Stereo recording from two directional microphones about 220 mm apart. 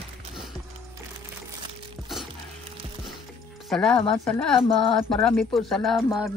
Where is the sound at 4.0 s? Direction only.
25° left (ahead or behind).